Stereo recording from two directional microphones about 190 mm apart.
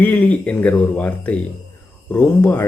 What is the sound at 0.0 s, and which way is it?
Speech, 10° left (ahead or behind).